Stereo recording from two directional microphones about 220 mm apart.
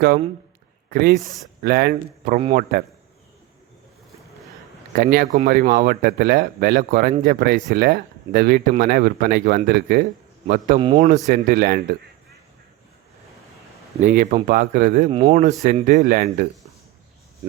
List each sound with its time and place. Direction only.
0.9 s speech: 40° right (ahead or behind)
1.1 s speech: centre (ahead or behind)
1.6 s speech: 45° right (ahead or behind)
4.9 s speech: 40° right (ahead or behind)
10.8 s a man's voice: 25° right (ahead or behind)
11.3 s speech: 45° right (ahead or behind)
14.0 s speech: 35° right (ahead or behind)